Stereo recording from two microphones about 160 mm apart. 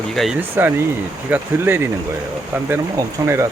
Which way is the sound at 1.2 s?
10° right (ahead or behind).